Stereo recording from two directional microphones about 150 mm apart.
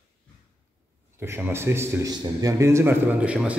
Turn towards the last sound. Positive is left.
turn(degrees=-10)  # may be behind; listen again after turning